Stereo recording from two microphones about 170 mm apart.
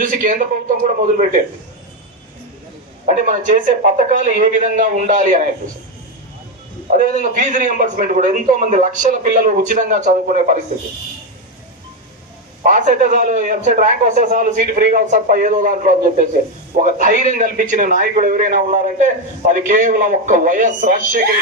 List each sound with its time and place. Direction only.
0.0 s a man's voice: 55° right (ahead or behind)
3.1 s a man's voice: 50° right (ahead or behind)
6.9 s a man's voice: 50° right (ahead or behind)
12.6 s a man's voice: 50° right (ahead or behind)